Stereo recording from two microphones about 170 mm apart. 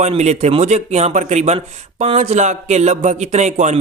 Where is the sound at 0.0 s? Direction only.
40° right (ahead or behind).